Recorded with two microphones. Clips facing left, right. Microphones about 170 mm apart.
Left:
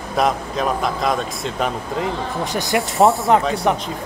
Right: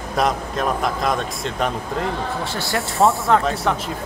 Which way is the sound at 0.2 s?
Centre (ahead or behind).